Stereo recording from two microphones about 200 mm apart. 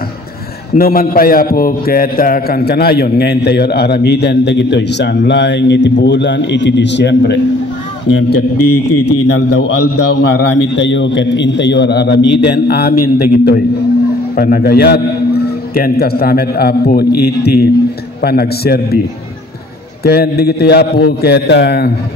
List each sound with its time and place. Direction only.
0.7 s a man's voice: 45° left (ahead or behind)
9.0 s a man's voice: 60° left (ahead or behind)
20.0 s a man's voice: 50° left (ahead or behind)